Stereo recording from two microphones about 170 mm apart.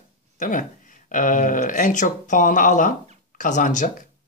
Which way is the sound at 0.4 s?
50° left (ahead or behind).